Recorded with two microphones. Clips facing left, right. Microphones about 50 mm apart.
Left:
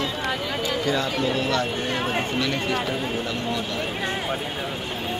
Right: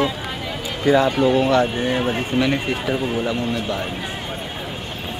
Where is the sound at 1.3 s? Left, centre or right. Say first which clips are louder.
Right 7 dB; right.